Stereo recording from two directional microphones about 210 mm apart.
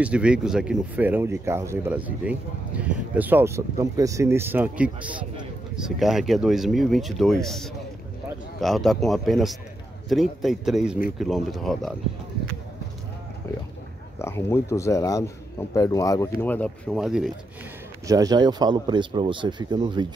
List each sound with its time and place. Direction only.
0.0 s speech: 5° right (ahead or behind)
14.1 s speech: 10° left (ahead or behind)
18.0 s speech: 15° right (ahead or behind)